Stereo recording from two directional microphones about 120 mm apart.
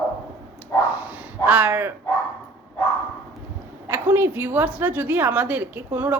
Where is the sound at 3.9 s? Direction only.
20° right (ahead or behind).